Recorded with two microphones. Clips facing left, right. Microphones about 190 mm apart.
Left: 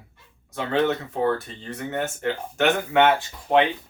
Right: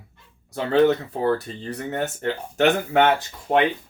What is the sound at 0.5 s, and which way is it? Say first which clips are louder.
Speech: right 5 dB; 35° right (ahead or behind).